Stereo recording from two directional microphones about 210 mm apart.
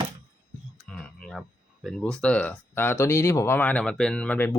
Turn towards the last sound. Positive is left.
turn(degrees=10)  # may be behind; listen again after turning